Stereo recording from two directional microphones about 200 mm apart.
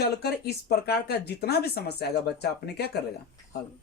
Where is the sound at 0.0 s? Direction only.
55° left (ahead or behind).